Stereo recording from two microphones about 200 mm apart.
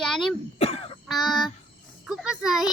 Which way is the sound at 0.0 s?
Centre (ahead or behind).